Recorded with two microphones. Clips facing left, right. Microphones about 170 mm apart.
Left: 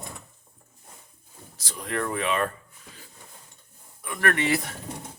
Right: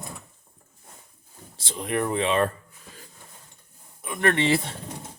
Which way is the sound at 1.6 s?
25° right (ahead or behind).